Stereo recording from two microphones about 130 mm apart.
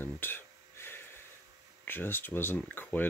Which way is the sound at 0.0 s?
15° left (ahead or behind).